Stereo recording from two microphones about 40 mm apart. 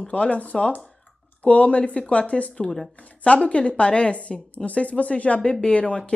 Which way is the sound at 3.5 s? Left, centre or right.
Left.